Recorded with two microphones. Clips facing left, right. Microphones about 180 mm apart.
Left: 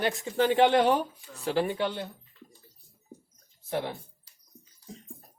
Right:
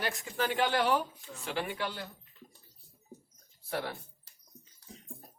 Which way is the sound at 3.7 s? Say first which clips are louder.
Left 4 dB; 20° left (ahead or behind).